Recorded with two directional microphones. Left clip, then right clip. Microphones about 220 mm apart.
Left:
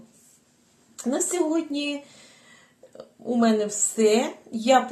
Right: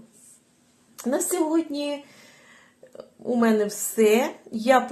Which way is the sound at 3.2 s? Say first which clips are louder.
Right 1 dB; 30° right (ahead or behind).